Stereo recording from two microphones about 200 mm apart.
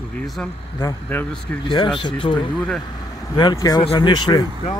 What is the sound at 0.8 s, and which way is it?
Speech, 15° left (ahead or behind).